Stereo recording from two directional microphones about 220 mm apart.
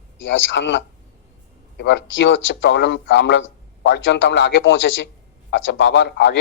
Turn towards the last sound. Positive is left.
turn(degrees=55)  # may be behind; listen again after turning